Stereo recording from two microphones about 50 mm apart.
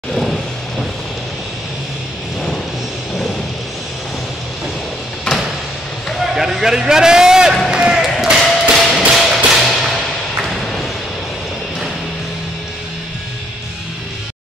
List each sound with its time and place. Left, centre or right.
0.1 s vehicle: centre
5.3 s a sound: centre
6.1 s a man's voice: centre
7.7 s basketball bounce: centre
8.0 s a sound: centre
8.7 s music: centre